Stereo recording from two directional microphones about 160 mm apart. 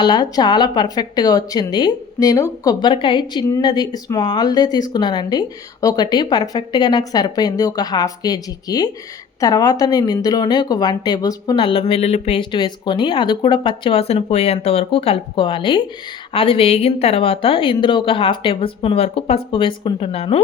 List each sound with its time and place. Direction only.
0.0 s speech: 25° left (ahead or behind)